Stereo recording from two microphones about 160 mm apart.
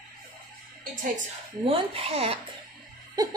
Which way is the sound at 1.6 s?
35° right (ahead or behind).